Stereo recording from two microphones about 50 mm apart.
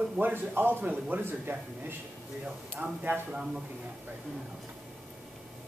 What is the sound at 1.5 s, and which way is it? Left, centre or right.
Speech, right.